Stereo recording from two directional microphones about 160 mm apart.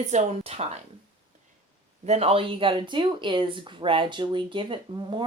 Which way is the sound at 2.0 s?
40° right (ahead or behind).